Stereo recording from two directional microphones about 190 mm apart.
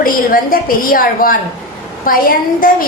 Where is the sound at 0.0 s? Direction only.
50° left (ahead or behind).